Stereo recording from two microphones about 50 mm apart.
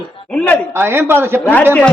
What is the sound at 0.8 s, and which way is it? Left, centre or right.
Speech, right.